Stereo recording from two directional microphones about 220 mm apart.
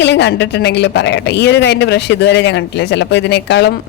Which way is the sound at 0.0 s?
50° left (ahead or behind).